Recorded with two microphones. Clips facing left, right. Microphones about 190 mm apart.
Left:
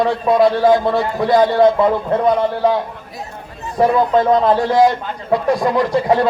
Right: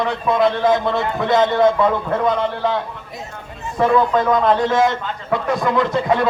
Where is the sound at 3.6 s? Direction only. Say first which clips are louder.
Left 1 dB; 35° left (ahead or behind).